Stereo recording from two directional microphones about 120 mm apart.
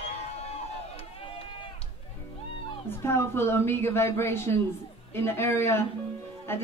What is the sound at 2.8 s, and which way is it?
A woman's voice, 20° left (ahead or behind).